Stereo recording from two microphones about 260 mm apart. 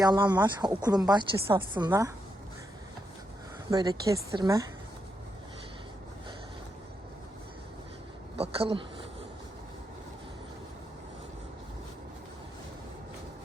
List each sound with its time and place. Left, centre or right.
0.0 s a woman's voice: centre
3.7 s a woman's voice: centre
8.4 s speech: right